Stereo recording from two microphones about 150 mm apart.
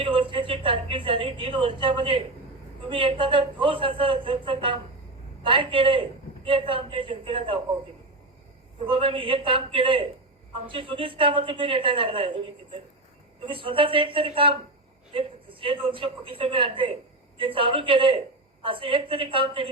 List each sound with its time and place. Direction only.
0.0 s a woman's voice: 35° right (ahead or behind)
8.8 s a woman's voice: 35° right (ahead or behind)